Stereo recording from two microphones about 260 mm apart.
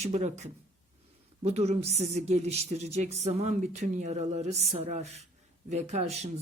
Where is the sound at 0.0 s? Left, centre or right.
Right.